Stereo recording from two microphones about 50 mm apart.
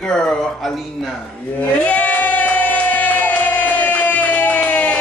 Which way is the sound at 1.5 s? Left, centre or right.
Left.